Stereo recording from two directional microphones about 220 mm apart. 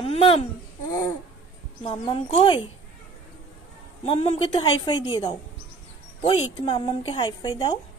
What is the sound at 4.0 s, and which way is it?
Speech, 25° left (ahead or behind).